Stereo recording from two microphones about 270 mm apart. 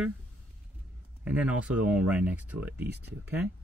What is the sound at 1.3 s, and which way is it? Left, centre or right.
Speech, centre.